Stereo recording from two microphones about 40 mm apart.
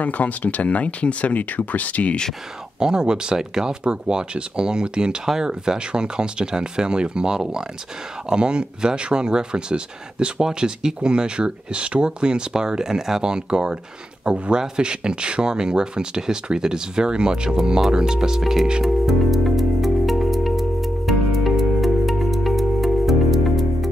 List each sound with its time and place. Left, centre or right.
0.0 s speech: left
2.8 s speech: centre
5.2 s speech: centre
5.5 s speech: right
18.4 s speech: centre
18.9 s music: centre